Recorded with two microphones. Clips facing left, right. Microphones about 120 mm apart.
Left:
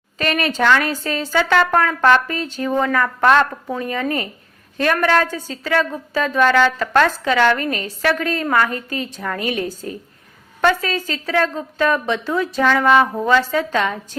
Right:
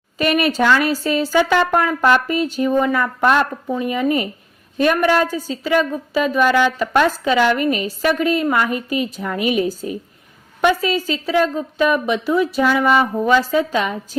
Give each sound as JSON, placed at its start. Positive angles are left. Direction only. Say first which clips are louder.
{"t": 0.2, "sound": "a woman's voice", "louder": "right 3 dB", "side_deg": -10}